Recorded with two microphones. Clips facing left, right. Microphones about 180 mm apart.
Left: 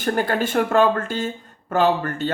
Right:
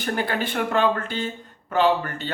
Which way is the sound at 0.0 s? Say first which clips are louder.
Left 4 dB; 45° left (ahead or behind).